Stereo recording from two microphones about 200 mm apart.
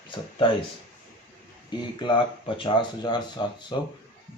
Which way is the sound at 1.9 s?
25° left (ahead or behind).